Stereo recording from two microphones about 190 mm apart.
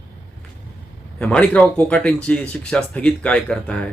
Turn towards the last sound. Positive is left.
turn(degrees=5)  # may be behind; listen again after turning